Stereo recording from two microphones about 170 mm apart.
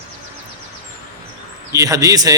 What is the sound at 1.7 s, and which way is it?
Speech, 20° right (ahead or behind).